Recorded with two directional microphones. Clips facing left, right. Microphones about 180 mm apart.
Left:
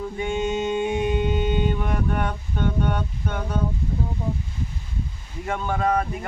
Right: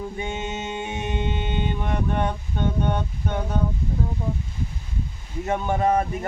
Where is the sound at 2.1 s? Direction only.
20° right (ahead or behind).